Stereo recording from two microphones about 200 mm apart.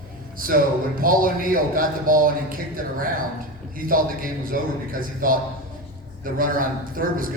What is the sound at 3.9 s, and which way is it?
A man's voice, 45° right (ahead or behind).